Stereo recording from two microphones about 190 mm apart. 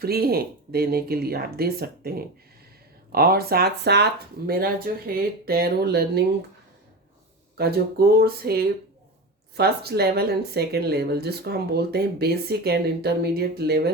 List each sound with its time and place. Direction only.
0.0 s speech: 55° right (ahead or behind)
7.6 s speech: 55° right (ahead or behind)